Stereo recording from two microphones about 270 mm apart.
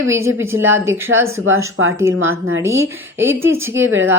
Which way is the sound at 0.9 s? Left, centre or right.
Right.